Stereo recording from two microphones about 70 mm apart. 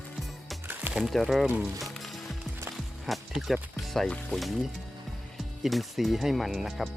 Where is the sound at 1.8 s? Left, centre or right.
Centre.